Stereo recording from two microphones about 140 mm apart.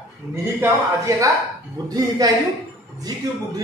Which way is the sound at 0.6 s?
20° right (ahead or behind).